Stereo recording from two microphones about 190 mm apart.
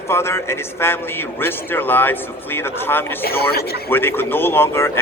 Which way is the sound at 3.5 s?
55° left (ahead or behind).